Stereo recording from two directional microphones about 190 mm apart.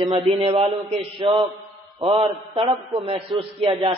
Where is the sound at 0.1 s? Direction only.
30° right (ahead or behind).